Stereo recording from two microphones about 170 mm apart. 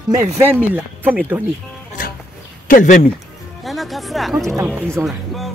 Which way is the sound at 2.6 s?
50° left (ahead or behind).